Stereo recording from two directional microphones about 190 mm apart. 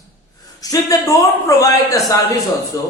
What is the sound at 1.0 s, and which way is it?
Mantra, 15° left (ahead or behind).